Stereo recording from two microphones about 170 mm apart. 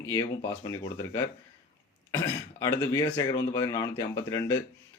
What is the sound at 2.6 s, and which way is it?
Speech, 20° left (ahead or behind).